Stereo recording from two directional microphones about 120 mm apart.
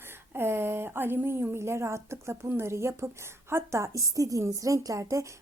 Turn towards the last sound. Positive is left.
turn(degrees=-25)  # may be behind; listen again after turning